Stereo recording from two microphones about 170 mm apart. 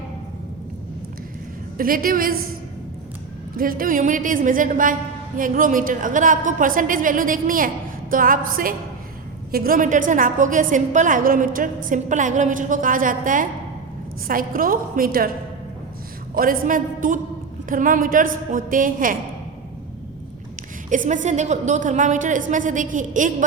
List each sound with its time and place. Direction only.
1.8 s a woman's voice: 55° right (ahead or behind)
3.6 s a woman's voice: 55° right (ahead or behind)
16.3 s a woman's voice: 55° right (ahead or behind)
20.9 s a woman's voice: 50° right (ahead or behind)